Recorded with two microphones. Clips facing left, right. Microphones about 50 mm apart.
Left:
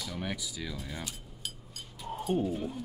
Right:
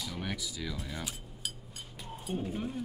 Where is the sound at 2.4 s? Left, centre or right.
Right.